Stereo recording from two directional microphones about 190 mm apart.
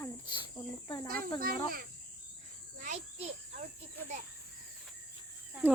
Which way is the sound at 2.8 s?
35° right (ahead or behind).